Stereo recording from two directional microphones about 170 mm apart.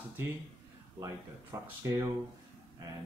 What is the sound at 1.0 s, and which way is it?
Speech, 20° right (ahead or behind).